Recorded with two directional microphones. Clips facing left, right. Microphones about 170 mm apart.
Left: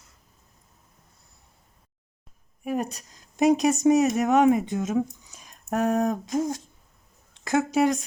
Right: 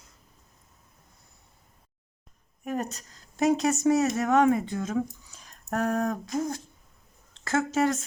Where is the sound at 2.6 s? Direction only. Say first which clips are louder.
Left 3 dB; 10° left (ahead or behind).